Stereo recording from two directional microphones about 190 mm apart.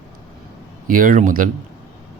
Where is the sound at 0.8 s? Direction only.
45° right (ahead or behind).